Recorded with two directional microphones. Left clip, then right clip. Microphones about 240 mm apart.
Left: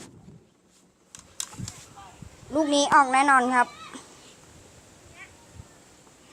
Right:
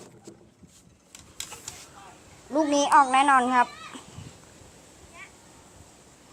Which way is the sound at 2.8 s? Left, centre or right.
Centre.